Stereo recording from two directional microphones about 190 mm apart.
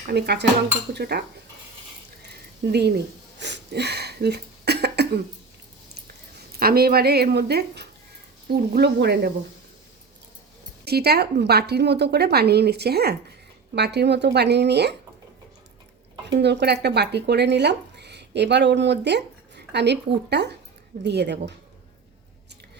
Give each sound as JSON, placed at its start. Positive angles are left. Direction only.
{"t": 0.1, "sound": "a woman's voice", "side_deg": -60}
{"t": 2.7, "sound": "a sound", "side_deg": -60}
{"t": 6.6, "sound": "a woman's voice", "side_deg": -55}
{"t": 10.8, "sound": "a woman's voice", "side_deg": -55}
{"t": 16.2, "sound": "a woman's voice", "side_deg": -65}